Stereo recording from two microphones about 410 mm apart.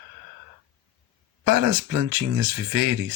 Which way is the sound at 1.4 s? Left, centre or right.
Right.